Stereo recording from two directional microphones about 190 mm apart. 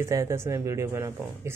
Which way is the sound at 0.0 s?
15° right (ahead or behind).